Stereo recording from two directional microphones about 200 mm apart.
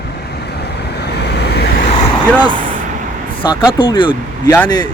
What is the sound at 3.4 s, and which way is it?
Speech, 25° left (ahead or behind).